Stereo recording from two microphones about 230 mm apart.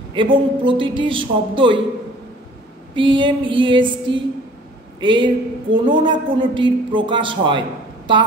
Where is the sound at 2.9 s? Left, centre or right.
Right.